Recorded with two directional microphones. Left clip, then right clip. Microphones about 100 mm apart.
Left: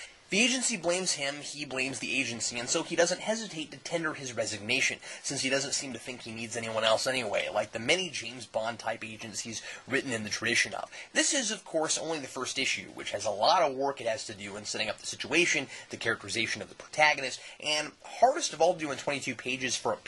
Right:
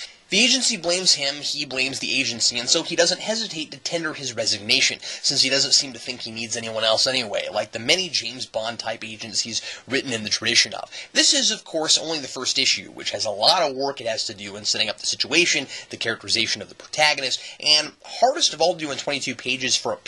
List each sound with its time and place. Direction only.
0.3 s speech: 15° right (ahead or behind); by 7.5 s centre (ahead or behind)
7.5 s speech: 20° right (ahead or behind)